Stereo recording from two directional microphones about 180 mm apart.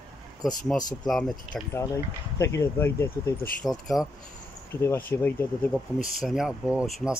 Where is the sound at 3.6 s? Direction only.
Centre (ahead or behind).